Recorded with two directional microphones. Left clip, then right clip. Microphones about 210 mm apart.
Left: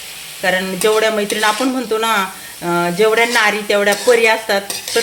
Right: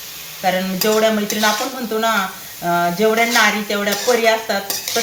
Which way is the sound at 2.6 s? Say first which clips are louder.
Left 2 dB; 50° left (ahead or behind).